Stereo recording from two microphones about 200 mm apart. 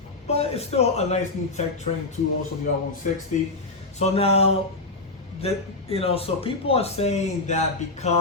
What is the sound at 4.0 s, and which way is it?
Speech, 30° left (ahead or behind).